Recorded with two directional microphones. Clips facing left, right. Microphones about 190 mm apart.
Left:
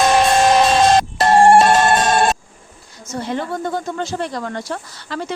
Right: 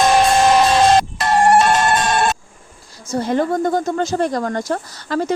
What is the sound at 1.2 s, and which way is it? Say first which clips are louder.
Music: left 6 dB; 30° left (ahead or behind).